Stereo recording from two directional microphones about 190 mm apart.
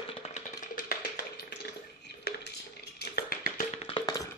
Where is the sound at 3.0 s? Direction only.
55° left (ahead or behind).